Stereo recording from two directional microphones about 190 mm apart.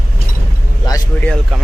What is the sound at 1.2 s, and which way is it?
Speech, 5° left (ahead or behind).